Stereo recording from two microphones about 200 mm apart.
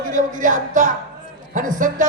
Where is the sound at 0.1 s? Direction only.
40° right (ahead or behind).